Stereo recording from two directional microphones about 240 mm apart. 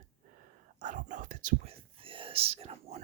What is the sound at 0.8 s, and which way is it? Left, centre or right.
Whispering, right.